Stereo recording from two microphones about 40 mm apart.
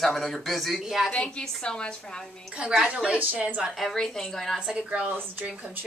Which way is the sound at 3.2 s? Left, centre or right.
Right.